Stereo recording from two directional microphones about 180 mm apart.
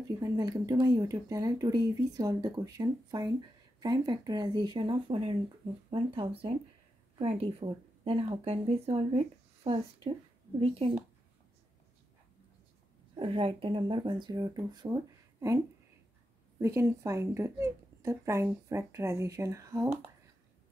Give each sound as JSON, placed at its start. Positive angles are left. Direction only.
{"t": 0.2, "sound": "speech", "side_deg": -20}
{"t": 13.1, "sound": "speech", "side_deg": -30}
{"t": 16.5, "sound": "speech", "side_deg": -15}